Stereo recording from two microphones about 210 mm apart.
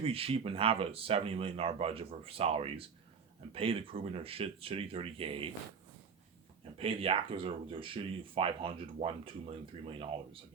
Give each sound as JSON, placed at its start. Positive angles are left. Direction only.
{"t": 0.0, "sound": "speech", "side_deg": -25}
{"t": 6.7, "sound": "speech", "side_deg": -25}